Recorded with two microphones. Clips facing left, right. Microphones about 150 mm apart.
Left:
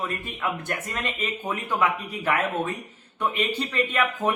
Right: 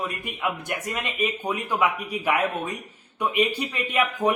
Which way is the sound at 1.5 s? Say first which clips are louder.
Left 1 dB; 15° right (ahead or behind).